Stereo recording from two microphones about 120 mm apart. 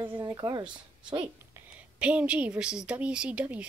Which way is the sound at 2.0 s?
10° right (ahead or behind).